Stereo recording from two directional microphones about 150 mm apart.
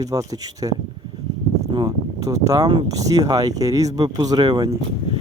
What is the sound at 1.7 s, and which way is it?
Speech, 25° right (ahead or behind).